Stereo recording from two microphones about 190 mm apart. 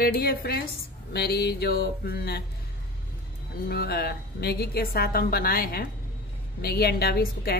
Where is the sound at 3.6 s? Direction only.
55° left (ahead or behind).